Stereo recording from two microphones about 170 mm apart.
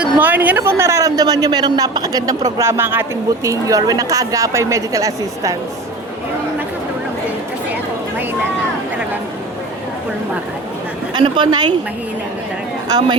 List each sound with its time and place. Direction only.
0.0 s a man's voice: 10° right (ahead or behind)
11.1 s a man's voice: 25° right (ahead or behind)